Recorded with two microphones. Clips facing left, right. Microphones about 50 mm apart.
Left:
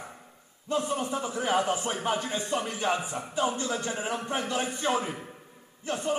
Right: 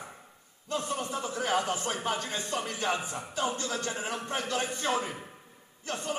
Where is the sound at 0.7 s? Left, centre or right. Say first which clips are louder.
Left 4 dB; centre.